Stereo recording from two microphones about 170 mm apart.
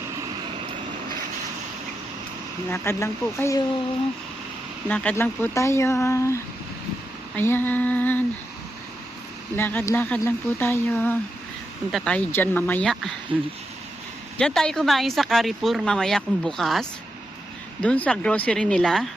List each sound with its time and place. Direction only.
2.6 s speech: 15° left (ahead or behind)
4.9 s speech: 10° left (ahead or behind)
9.6 s speech: 10° left (ahead or behind)
14.3 s speech: 5° left (ahead or behind)
17.8 s speech: 5° left (ahead or behind)